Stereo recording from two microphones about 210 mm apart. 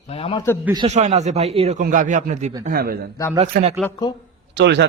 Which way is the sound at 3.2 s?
15° left (ahead or behind).